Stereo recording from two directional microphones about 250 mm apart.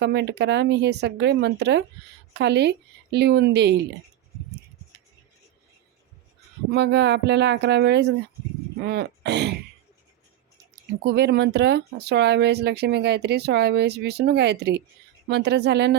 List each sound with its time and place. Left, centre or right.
0.0 s speech: right
6.7 s speech: right
11.0 s speech: right